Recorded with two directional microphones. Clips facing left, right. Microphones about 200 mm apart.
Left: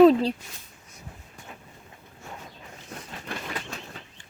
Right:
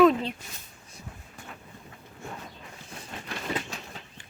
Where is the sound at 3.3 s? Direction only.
55° left (ahead or behind).